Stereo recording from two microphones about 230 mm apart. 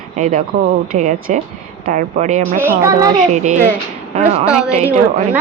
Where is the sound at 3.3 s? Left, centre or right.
Right.